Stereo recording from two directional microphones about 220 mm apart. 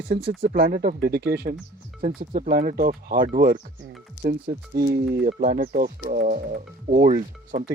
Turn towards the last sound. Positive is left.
turn(degrees=-35)  # may be behind; listen again after turning